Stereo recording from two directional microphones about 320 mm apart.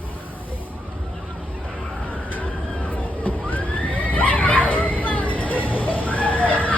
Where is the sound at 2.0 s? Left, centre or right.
Centre.